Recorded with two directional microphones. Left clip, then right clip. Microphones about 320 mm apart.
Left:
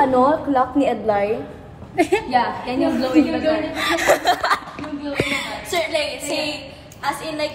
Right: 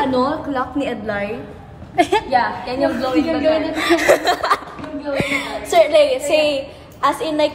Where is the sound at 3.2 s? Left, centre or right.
Left.